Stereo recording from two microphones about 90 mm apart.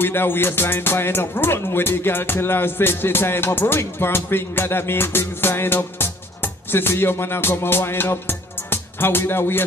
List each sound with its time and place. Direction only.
0.0 s music: 25° left (ahead or behind)